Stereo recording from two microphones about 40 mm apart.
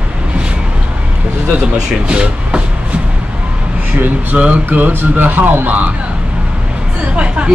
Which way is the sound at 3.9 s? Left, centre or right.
Right.